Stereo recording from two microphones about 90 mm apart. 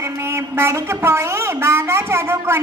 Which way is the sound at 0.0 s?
30° right (ahead or behind).